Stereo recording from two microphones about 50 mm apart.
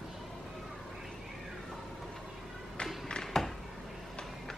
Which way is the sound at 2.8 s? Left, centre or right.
Centre.